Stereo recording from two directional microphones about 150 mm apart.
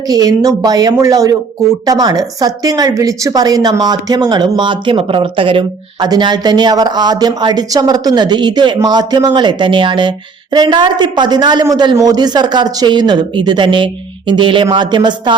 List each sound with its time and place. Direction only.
0.1 s speech: 25° right (ahead or behind)